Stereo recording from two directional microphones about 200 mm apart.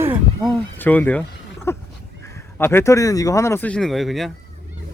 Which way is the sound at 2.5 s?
10° left (ahead or behind).